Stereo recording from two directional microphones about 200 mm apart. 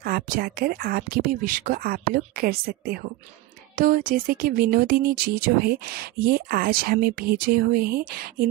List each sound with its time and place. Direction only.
0.0 s speech: 45° right (ahead or behind)